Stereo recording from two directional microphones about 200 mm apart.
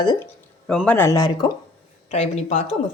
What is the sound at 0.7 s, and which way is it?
Speech, 5° left (ahead or behind).